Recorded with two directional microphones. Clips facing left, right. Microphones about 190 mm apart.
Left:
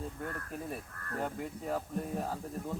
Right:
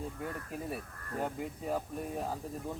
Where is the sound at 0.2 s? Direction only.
10° right (ahead or behind).